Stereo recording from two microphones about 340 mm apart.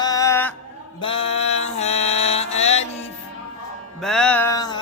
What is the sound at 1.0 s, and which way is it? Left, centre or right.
Mantra, centre.